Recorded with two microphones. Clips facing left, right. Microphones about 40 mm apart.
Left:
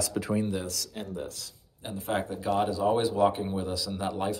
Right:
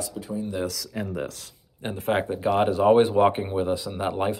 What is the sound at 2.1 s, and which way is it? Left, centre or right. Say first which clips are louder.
Speech: right 5 dB; right.